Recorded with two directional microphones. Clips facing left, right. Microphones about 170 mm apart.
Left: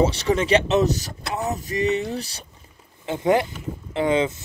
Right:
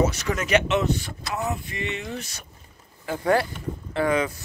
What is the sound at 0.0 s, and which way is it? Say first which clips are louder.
Speech: left 4 dB; 30° left (ahead or behind).